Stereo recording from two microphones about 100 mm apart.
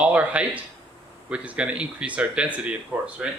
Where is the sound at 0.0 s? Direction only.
15° right (ahead or behind).